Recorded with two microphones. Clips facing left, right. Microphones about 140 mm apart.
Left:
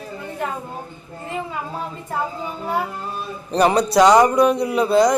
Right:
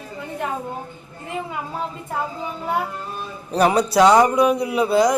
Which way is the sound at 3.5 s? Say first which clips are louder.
Left 1 dB; 5° right (ahead or behind).